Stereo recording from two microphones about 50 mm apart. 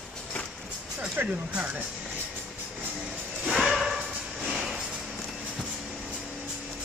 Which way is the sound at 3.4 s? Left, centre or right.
Centre.